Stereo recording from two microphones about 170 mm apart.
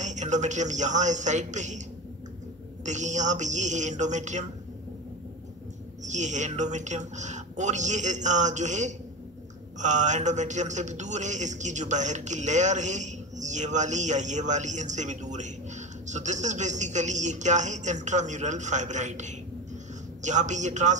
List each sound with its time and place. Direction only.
0.0 s a man's voice: 45° right (ahead or behind)
2.8 s a man's voice: 45° right (ahead or behind)
6.0 s a man's voice: 45° right (ahead or behind)